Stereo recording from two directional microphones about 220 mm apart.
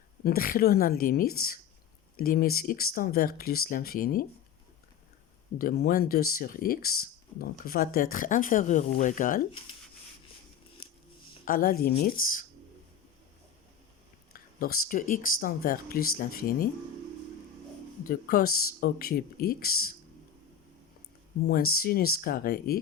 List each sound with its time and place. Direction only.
0.3 s speech: 40° left (ahead or behind)
5.5 s speech: 45° left (ahead or behind)
11.4 s speech: 40° left (ahead or behind)
14.3 s speech: 40° left (ahead or behind)
18.1 s speech: 40° left (ahead or behind)
21.4 s speech: 45° left (ahead or behind)